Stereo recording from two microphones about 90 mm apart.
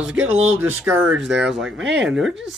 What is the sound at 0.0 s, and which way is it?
Speech, 15° right (ahead or behind).